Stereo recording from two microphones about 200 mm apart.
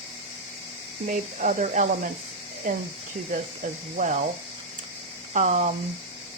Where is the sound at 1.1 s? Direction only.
40° right (ahead or behind).